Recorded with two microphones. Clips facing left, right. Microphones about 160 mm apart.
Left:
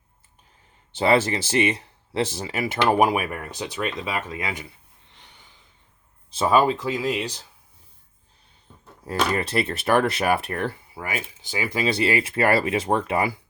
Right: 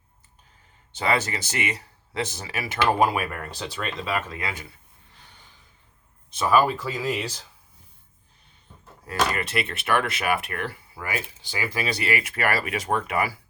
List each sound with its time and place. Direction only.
0.9 s speech: 25° left (ahead or behind)
5.1 s snort: 20° left (ahead or behind)
6.3 s speech: 25° left (ahead or behind)
9.0 s speech: 30° left (ahead or behind)